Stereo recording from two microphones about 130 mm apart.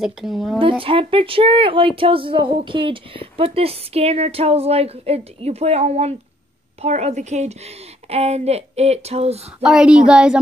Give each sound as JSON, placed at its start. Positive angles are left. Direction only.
{"t": 0.0, "sound": "speech", "side_deg": 0}
{"t": 0.6, "sound": "speech", "side_deg": -40}
{"t": 9.6, "sound": "speech", "side_deg": -5}